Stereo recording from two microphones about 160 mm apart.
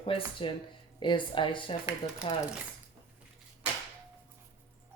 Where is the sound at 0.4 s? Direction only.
35° left (ahead or behind).